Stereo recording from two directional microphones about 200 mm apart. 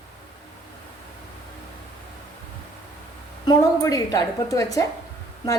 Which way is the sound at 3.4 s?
15° left (ahead or behind).